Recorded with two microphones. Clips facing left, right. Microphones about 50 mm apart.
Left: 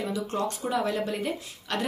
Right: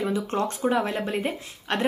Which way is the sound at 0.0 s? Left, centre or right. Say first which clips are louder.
Right 3 dB; right.